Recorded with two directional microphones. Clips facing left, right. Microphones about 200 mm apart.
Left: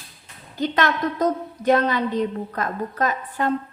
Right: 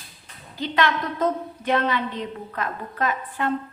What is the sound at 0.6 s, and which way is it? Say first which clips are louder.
A woman's voice: left 2 dB; 45° left (ahead or behind).